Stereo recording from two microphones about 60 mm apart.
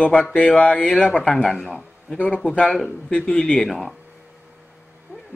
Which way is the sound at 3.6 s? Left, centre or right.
Centre.